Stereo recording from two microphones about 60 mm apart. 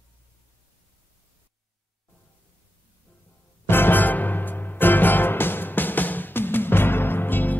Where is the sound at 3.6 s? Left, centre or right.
Left.